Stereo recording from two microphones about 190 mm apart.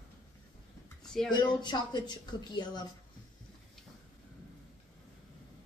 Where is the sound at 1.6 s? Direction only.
20° left (ahead or behind).